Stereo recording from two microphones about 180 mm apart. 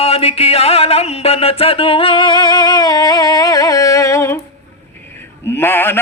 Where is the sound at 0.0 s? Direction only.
35° left (ahead or behind); by 4.4 s 15° left (ahead or behind).